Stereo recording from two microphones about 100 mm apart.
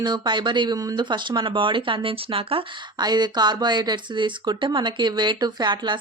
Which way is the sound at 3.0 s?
45° right (ahead or behind).